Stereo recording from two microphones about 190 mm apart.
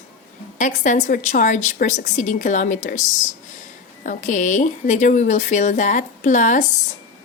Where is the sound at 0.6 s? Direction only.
40° left (ahead or behind).